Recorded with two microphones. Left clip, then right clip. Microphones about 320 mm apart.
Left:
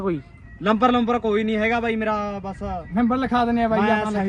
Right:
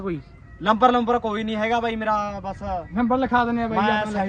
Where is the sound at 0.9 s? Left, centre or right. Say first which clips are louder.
Left 1 dB; centre.